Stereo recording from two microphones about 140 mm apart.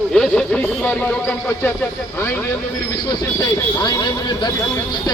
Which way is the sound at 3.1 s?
30° left (ahead or behind).